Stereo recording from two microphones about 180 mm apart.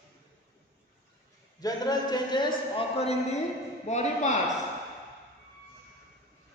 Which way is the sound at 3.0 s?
35° left (ahead or behind).